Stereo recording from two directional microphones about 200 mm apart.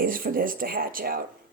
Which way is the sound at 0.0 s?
45° right (ahead or behind).